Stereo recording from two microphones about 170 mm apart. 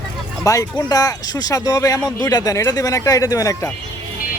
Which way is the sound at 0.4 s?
20° left (ahead or behind).